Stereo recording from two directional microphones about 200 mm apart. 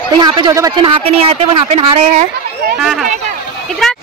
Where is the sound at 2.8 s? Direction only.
5° right (ahead or behind).